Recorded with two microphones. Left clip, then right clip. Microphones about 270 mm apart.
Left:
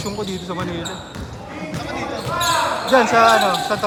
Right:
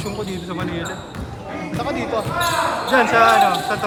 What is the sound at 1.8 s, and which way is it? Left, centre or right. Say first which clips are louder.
Basketball bounce: right 4 dB; centre.